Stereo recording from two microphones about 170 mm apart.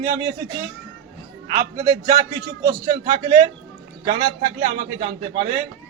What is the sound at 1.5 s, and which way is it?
A man's voice, 55° right (ahead or behind).